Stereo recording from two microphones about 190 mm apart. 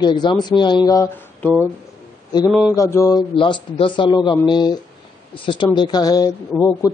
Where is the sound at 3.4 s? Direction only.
25° left (ahead or behind).